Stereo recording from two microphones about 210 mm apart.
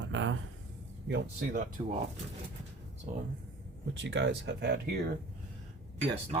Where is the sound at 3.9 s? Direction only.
60° right (ahead or behind).